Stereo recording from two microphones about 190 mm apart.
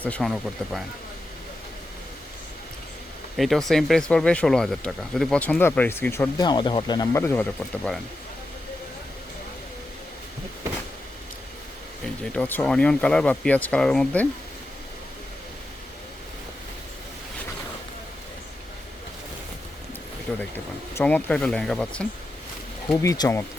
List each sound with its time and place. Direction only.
0.0 s speech: 5° left (ahead or behind)
3.3 s speech: centre (ahead or behind)
12.2 s speech: 5° left (ahead or behind)
20.9 s speech: 10° left (ahead or behind)
23.0 s speech: 20° left (ahead or behind)